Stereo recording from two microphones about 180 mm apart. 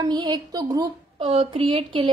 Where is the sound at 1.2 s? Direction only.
30° right (ahead or behind).